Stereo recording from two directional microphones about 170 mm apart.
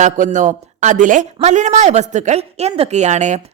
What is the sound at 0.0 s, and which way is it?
A man's voice, 50° right (ahead or behind).